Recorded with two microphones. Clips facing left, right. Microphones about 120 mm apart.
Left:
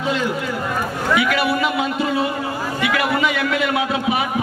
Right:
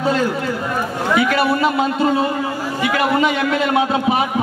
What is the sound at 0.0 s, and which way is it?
A man's voice, 40° right (ahead or behind).